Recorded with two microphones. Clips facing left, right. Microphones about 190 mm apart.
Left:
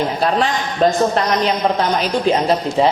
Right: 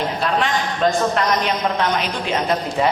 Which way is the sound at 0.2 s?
35° left (ahead or behind).